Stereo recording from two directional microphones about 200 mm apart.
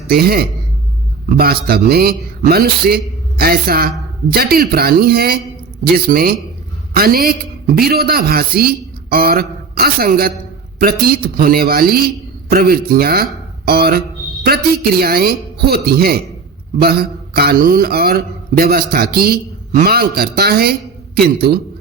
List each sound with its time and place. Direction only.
0.1 s a man's voice: 50° right (ahead or behind)